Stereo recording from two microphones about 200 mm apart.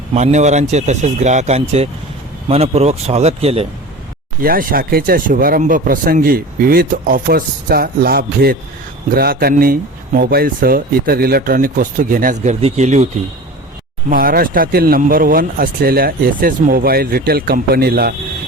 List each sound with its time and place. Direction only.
0.1 s speech: 35° right (ahead or behind)
4.4 s speech: 45° right (ahead or behind)
14.1 s speech: 45° right (ahead or behind)